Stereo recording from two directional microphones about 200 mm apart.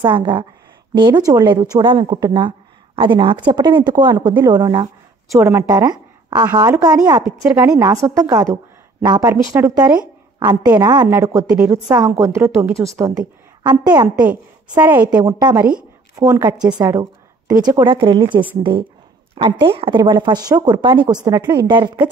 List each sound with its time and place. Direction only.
0.0 s a woman's voice: 25° right (ahead or behind); by 12.8 s 5° right (ahead or behind)
13.0 s speech: 20° right (ahead or behind)
14.8 s a woman's voice: 10° right (ahead or behind)